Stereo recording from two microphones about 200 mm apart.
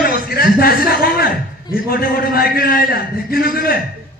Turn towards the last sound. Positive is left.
turn(degrees=45)  # may be behind; listen again after turning